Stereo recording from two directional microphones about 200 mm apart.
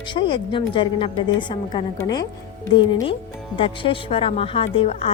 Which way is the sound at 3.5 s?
25° left (ahead or behind).